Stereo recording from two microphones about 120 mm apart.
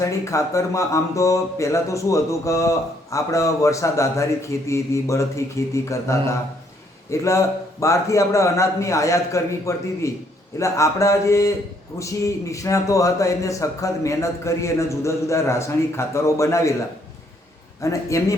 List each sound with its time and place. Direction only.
0.0 s speech: 25° left (ahead or behind)
17.7 s speech: 25° left (ahead or behind)